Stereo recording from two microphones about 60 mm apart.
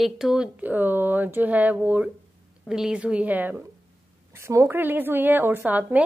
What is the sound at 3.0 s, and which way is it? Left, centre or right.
Speech, right.